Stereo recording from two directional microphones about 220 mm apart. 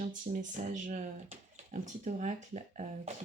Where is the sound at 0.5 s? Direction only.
35° right (ahead or behind).